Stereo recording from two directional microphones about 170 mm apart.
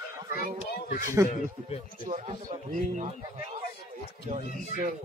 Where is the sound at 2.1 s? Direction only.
45° right (ahead or behind).